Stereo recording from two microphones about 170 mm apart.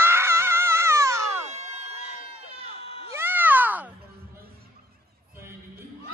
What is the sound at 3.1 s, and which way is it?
Cat, 15° right (ahead or behind).